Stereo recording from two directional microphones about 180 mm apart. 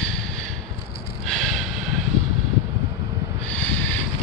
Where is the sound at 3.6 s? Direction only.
10° left (ahead or behind).